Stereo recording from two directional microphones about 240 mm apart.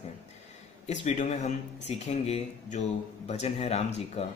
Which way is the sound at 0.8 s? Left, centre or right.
Left.